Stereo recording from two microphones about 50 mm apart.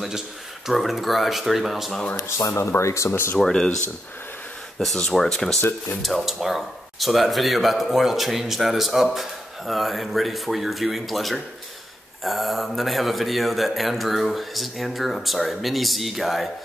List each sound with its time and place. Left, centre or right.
0.7 s speech: centre
2.2 s speech: left
3.1 s speech: left
3.3 s speech: centre
4.7 s speech: centre